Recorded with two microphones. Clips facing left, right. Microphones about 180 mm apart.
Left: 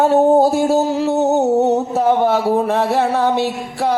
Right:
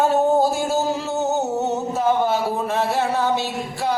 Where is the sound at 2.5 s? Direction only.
60° left (ahead or behind).